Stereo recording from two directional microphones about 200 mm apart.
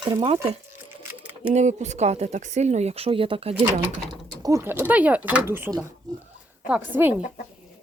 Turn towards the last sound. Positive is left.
turn(degrees=-10)  # may be behind; listen again after turning